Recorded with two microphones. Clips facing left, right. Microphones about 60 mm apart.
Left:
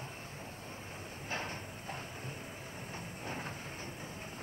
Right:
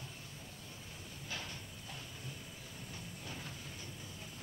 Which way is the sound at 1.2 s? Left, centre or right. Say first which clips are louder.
Left 6 dB; left.